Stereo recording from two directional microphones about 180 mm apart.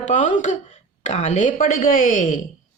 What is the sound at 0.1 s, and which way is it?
Speech, 45° left (ahead or behind).